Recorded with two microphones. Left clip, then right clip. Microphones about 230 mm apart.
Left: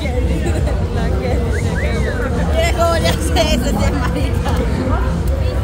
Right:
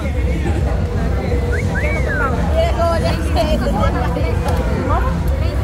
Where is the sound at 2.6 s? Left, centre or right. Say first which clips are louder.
Left 2 dB; left.